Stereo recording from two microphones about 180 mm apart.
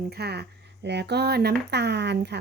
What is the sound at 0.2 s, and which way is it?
Speech, 65° right (ahead or behind).